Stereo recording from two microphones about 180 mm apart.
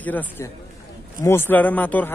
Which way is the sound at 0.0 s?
10° left (ahead or behind).